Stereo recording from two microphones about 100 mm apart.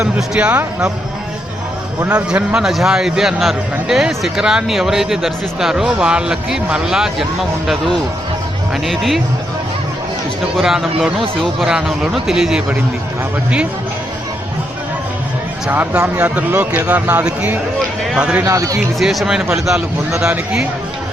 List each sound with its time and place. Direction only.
0.0 s speech: 10° right (ahead or behind)
2.0 s a man's voice: 10° right (ahead or behind)
8.7 s a man's voice: centre (ahead or behind)
10.6 s a man's voice: 5° right (ahead or behind)
15.7 s speech: 15° right (ahead or behind)
18.4 s speech: 35° right (ahead or behind)
18.9 s a man's voice: 5° right (ahead or behind)